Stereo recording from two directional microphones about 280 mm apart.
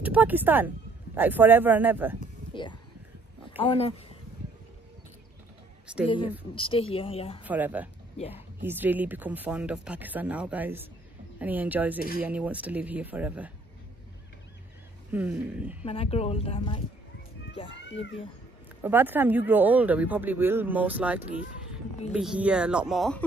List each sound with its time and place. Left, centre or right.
0.0 s speech: centre
2.1 s a sound: centre
3.5 s speech: centre
6.0 s a woman's voice: centre
7.4 s speech: centre
15.0 s speech: centre
15.8 s speech: left
18.8 s speech: centre